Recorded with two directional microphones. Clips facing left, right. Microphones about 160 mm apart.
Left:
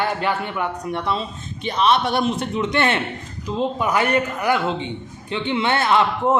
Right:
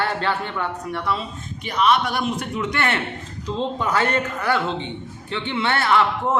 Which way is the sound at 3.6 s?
10° left (ahead or behind).